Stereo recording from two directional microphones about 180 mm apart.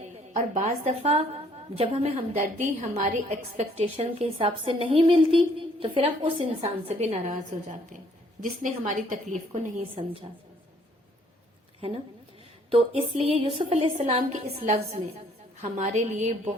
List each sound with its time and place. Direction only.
0.3 s a woman's voice: 40° right (ahead or behind)
8.8 s a woman's voice: 45° right (ahead or behind)
9.5 s a woman's voice: 30° right (ahead or behind)
12.7 s a woman's voice: 30° right (ahead or behind)